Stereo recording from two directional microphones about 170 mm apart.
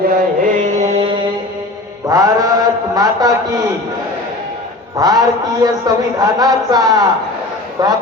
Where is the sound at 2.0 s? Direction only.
20° right (ahead or behind).